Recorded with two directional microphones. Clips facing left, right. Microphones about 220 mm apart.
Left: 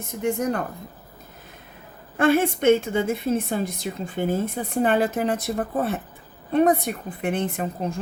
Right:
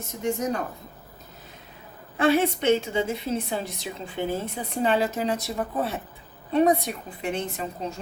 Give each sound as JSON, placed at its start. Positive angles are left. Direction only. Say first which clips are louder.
{"t": 0.2, "sound": "a woman's voice", "louder": "left 3 dB", "side_deg": 55}
{"t": 2.1, "sound": "a woman's voice", "louder": "left 2 dB", "side_deg": 50}